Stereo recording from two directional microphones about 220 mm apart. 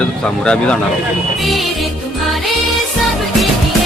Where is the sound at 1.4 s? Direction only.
Centre (ahead or behind).